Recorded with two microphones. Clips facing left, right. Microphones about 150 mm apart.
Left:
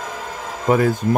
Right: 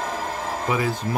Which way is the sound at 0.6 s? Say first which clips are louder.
Left 8 dB; 50° left (ahead or behind).